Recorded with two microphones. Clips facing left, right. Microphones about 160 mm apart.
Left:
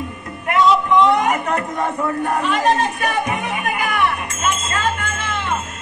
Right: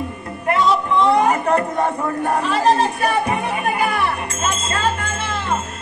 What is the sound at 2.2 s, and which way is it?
Music, 35° right (ahead or behind).